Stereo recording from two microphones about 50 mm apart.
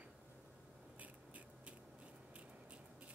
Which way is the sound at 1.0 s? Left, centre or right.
Right.